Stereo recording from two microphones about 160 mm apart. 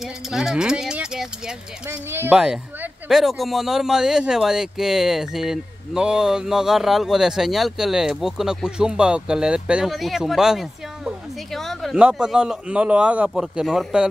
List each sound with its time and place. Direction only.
0.0 s speech: 5° right (ahead or behind)
1.9 s speech: 15° right (ahead or behind)
2.3 s speech: 5° right (ahead or behind)